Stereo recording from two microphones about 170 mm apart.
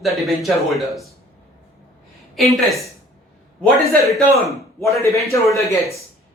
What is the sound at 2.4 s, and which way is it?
Speech, centre (ahead or behind).